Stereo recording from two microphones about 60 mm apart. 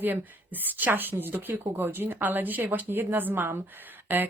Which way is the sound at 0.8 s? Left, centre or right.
Right.